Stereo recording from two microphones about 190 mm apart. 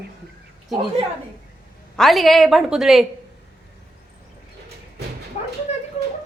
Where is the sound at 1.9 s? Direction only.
Centre (ahead or behind).